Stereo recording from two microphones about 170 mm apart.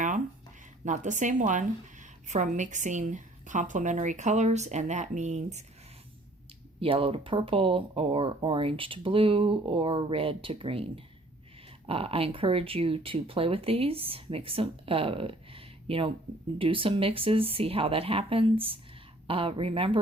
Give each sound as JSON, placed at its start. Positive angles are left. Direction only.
{"t": 0.9, "sound": "a woman's voice", "side_deg": -45}
{"t": 6.7, "sound": "speech", "side_deg": -35}